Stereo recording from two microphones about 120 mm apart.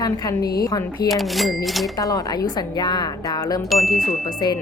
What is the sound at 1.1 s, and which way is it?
Speech, centre (ahead or behind).